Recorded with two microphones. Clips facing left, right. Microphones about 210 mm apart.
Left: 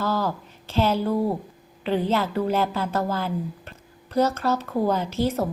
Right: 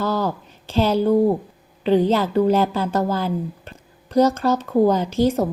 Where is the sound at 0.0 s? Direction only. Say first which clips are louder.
Right 3 dB; 30° right (ahead or behind).